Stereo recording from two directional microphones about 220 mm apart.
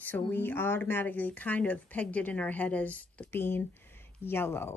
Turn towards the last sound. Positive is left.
turn(degrees=10)  # may be behind; listen again after turning